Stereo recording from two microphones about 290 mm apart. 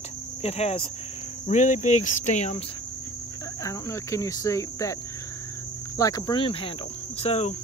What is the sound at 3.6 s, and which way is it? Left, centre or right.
Cricket, centre.